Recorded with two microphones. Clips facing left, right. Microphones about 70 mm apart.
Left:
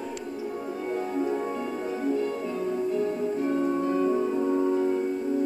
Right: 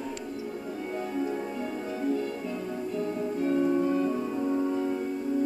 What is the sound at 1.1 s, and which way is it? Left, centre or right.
Music, centre.